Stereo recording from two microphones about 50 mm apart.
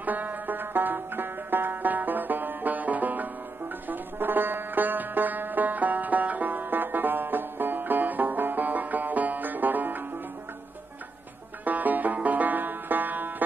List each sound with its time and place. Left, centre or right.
0.0 s music: right
3.9 s banjo: right
11.6 s banjo: right